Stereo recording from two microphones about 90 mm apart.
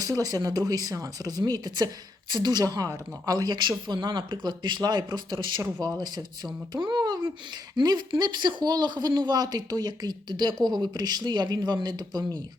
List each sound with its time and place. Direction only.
0.0 s a woman's voice: 45° right (ahead or behind); by 5.6 s 60° right (ahead or behind)
6.0 s a woman's voice: 50° right (ahead or behind)